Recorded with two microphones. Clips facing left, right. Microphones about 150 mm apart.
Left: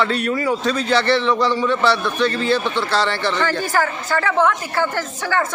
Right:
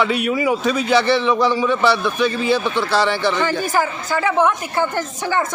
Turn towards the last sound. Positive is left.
turn(degrees=-15)  # may be behind; listen again after turning